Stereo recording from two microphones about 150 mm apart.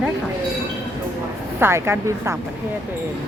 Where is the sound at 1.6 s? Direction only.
15° right (ahead or behind).